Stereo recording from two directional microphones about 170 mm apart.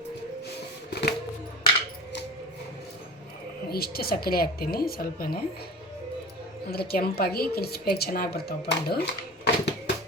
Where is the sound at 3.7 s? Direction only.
65° left (ahead or behind).